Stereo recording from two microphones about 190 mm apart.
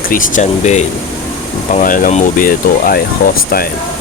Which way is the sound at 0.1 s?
45° left (ahead or behind).